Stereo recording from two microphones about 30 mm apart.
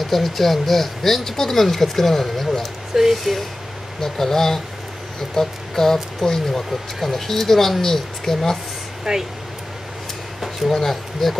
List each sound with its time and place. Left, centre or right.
0.0 s speech: centre
7.0 s speech: centre
9.1 s speech: centre
10.7 s speech: centre